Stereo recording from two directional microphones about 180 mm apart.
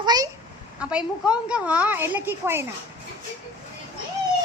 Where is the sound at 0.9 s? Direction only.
5° right (ahead or behind).